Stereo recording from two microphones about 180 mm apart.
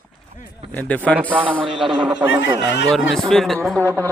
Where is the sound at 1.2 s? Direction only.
10° right (ahead or behind).